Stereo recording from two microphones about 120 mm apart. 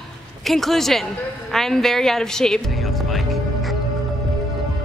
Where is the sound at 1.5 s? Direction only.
5° left (ahead or behind).